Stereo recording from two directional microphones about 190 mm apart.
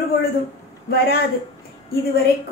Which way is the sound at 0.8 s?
55° left (ahead or behind).